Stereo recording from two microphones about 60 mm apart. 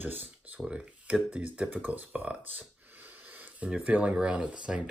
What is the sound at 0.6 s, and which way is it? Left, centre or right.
Speech, centre.